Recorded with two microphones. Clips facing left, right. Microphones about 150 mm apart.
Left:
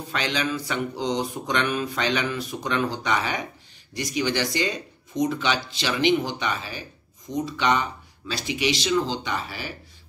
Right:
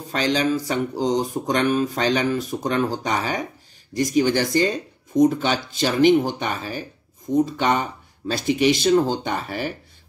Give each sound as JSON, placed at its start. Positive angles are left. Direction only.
{"t": 0.1, "sound": "mantra", "side_deg": -40}
{"t": 3.9, "sound": "speech", "side_deg": -45}